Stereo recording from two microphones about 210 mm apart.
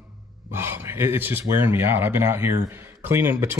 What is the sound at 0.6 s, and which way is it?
A man's voice, 10° right (ahead or behind).